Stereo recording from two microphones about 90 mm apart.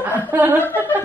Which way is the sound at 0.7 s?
20° right (ahead or behind).